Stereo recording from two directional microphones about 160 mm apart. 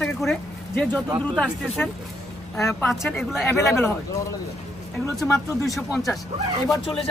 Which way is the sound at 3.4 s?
15° left (ahead or behind).